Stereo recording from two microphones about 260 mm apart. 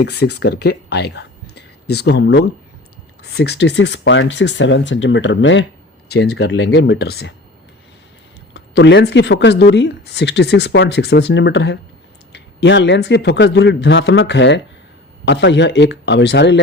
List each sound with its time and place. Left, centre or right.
0.0 s speech: left
8.5 s speech: left